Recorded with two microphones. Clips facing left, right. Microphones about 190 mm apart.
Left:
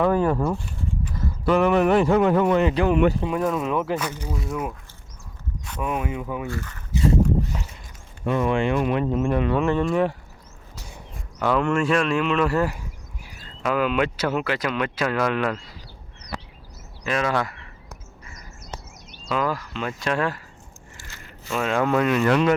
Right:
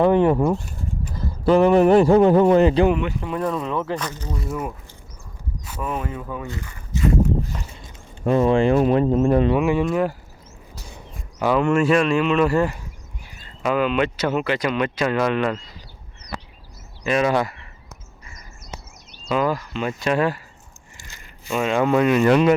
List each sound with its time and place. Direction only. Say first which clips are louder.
0.0 s speech: right 4 dB; 20° right (ahead or behind)
1.5 s speech: right 4 dB; 30° right (ahead or behind)
3.4 s speech: right 1 dB; centre (ahead or behind)
5.8 s speech: left 1 dB; 10° left (ahead or behind)
6.5 s speech: left 2 dB; 15° right (ahead or behind)
7.5 s a sound: left 1 dB; 5° left (ahead or behind)
8.2 s speech: right 5 dB; 35° right (ahead or behind)
9.5 s speech: right 2 dB; 10° right (ahead or behind)
11.3 s speech: right 3 dB; 5° right (ahead or behind)
16.2 s a sound: right 1 dB; centre (ahead or behind)
17.1 s speech: right 4 dB; 10° right (ahead or behind)
19.3 s speech: right 3 dB; centre (ahead or behind)
21.0 s a sound: left 1 dB; 15° right (ahead or behind)
21.7 s speech: right 3 dB; 5° right (ahead or behind)